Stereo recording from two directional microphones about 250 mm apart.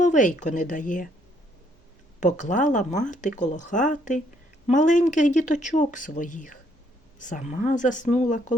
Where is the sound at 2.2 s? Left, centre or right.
Left.